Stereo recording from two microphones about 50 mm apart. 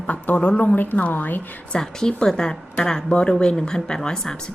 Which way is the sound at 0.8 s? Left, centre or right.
Left.